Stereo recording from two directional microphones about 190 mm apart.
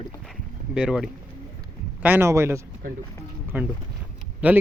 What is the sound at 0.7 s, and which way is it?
A man's voice, 5° right (ahead or behind).